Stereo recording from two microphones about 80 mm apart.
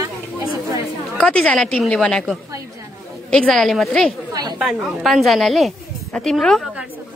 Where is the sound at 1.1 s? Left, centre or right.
Centre.